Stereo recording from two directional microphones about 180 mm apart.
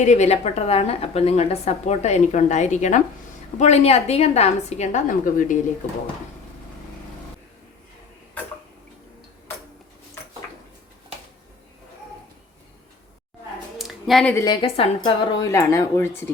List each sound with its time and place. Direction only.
0.0 s a woman's voice: 40° left (ahead or behind)
13.7 s a sound: centre (ahead or behind)
14.3 s a woman's voice: 25° left (ahead or behind)
15.4 s speech: 15° left (ahead or behind)